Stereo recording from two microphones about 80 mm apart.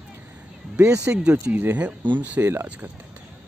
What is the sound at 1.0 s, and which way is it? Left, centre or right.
Speech, centre.